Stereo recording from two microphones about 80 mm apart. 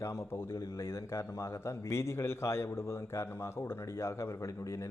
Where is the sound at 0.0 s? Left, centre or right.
Left.